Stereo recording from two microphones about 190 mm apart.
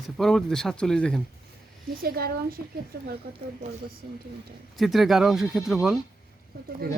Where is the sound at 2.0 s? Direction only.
50° right (ahead or behind).